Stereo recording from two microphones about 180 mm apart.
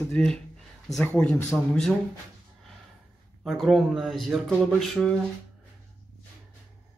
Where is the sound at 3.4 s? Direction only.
Centre (ahead or behind).